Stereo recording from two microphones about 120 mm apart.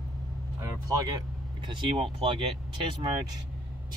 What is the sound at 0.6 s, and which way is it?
Speech, 25° right (ahead or behind).